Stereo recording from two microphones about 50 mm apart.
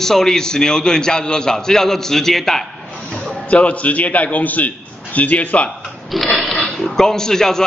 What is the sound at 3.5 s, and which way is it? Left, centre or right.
A man's voice, left.